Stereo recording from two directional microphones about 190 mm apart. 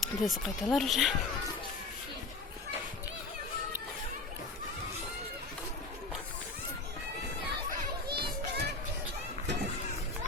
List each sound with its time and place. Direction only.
0.0 s speech: centre (ahead or behind)
7.7 s children playing: 55° right (ahead or behind)